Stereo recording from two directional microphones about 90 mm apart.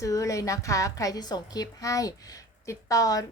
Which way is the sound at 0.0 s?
40° left (ahead or behind).